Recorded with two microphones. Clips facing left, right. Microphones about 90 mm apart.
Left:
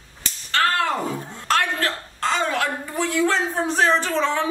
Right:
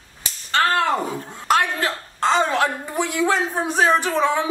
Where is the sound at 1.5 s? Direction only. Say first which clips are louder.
Right 2 dB; 15° right (ahead or behind).